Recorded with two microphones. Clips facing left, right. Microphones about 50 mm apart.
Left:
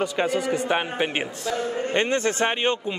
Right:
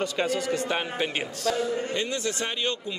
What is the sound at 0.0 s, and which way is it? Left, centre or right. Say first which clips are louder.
A man's voice: left 3 dB; centre.